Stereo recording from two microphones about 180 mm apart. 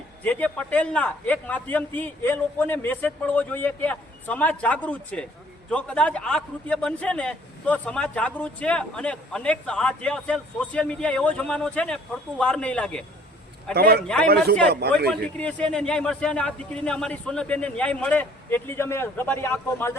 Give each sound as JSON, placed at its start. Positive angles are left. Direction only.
{"t": 0.2, "sound": "a man's voice", "side_deg": 10}
{"t": 13.7, "sound": "a man's voice", "side_deg": -65}
{"t": 15.1, "sound": "a man's voice", "side_deg": 5}